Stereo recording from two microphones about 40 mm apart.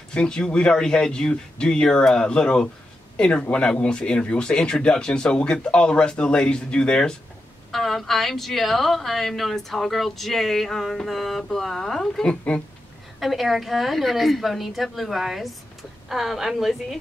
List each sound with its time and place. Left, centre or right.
0.1 s speech: left
7.7 s speech: centre
12.2 s speech: left
13.2 s speech: centre